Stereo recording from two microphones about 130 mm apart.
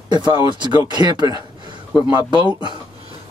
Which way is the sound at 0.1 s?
35° right (ahead or behind).